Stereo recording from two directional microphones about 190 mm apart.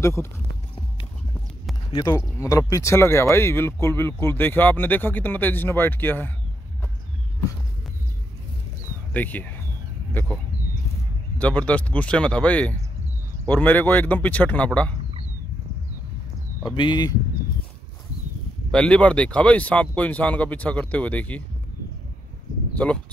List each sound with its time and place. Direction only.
0.0 s speech: 15° left (ahead or behind)
1.9 s speech: 20° left (ahead or behind)
9.1 s speech: 10° left (ahead or behind)
11.3 s speech: 5° left (ahead or behind)
16.7 s speech: 25° left (ahead or behind)
18.7 s speech: 5° left (ahead or behind)